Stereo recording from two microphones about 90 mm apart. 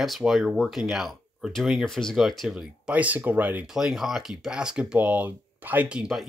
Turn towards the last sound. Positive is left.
turn(degrees=-15)  # may be behind; listen again after turning